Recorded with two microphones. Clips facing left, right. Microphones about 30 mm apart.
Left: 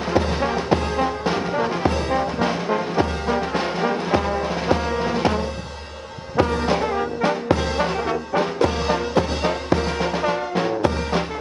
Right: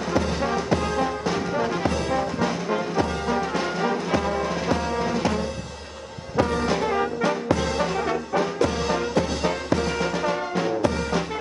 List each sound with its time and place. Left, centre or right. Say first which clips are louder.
0.1 s music: left 3 dB; left